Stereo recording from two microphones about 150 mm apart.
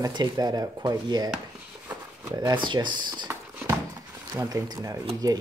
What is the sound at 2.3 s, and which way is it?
Speech, 30° right (ahead or behind).